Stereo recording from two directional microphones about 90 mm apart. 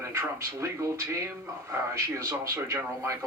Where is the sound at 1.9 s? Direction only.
35° right (ahead or behind).